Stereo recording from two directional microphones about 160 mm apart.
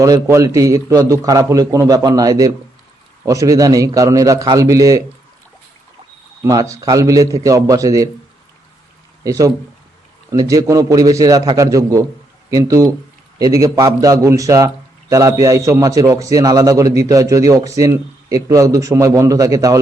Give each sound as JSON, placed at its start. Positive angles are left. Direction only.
{"t": 0.0, "sound": "a man's voice", "side_deg": -20}
{"t": 6.4, "sound": "a man's voice", "side_deg": -20}
{"t": 9.2, "sound": "a man's voice", "side_deg": -20}